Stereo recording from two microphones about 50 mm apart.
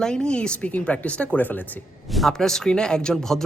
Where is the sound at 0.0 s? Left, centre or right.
Centre; by 1.6 s left.